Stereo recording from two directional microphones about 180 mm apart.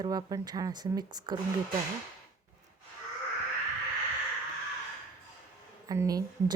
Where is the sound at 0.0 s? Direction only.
20° right (ahead or behind).